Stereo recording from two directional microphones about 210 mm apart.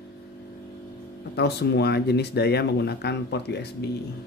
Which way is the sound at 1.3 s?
50° left (ahead or behind).